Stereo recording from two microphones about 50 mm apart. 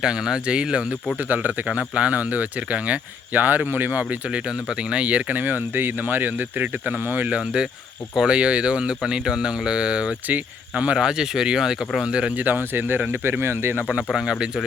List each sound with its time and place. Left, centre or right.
0.0 s speech: centre
1.3 s speech: right
4.3 s speech: centre
7.3 s speech: centre
10.2 s speech: right
10.9 s speech: centre
12.4 s speech: right
14.3 s speech: centre